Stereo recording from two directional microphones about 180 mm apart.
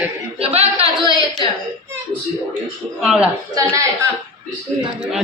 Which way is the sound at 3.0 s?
5° right (ahead or behind).